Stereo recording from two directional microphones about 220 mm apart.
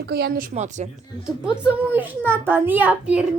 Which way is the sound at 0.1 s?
45° right (ahead or behind).